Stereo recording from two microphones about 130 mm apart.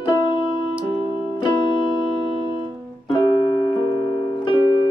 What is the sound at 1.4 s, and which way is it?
Music, 35° left (ahead or behind).